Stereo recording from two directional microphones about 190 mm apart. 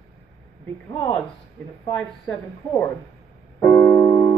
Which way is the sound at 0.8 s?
20° left (ahead or behind).